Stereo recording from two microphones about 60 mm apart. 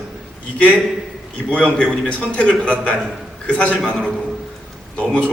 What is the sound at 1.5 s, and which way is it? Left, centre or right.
A man's voice, centre.